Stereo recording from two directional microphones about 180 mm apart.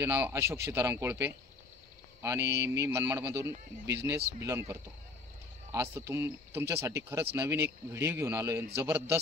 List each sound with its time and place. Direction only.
0.0 s speech: 15° right (ahead or behind)